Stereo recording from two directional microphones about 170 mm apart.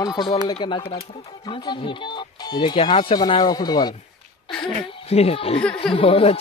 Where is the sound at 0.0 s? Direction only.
25° left (ahead or behind).